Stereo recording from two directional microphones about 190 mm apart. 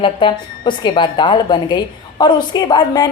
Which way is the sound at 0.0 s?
25° left (ahead or behind).